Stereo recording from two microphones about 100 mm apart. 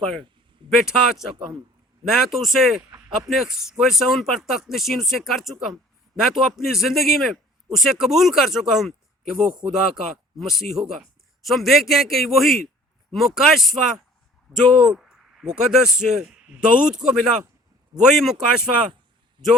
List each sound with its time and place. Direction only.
0.0 s speech: 5° left (ahead or behind)
19.4 s speech: 50° right (ahead or behind)